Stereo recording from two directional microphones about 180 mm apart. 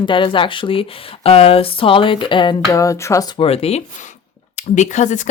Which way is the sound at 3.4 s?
35° left (ahead or behind).